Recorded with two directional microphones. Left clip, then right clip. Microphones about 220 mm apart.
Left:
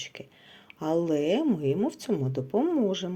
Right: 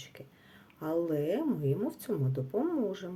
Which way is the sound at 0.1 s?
25° left (ahead or behind).